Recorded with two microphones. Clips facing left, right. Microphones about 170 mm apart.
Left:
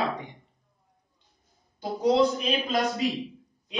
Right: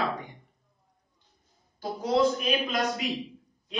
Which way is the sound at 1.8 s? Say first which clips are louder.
Left 2 dB; 25° left (ahead or behind).